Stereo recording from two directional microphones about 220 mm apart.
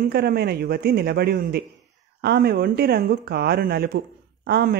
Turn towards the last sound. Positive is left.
turn(degrees=-45)  # may be behind; listen again after turning